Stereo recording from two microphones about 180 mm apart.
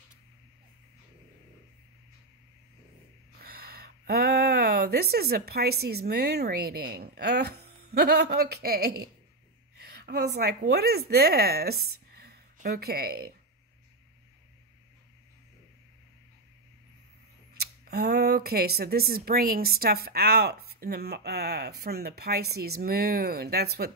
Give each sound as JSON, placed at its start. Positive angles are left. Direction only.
{"t": 3.3, "sound": "speech", "side_deg": -55}
{"t": 9.8, "sound": "a sound", "side_deg": -65}
{"t": 10.7, "sound": "a woman's voice", "side_deg": -60}
{"t": 17.6, "sound": "speech", "side_deg": -60}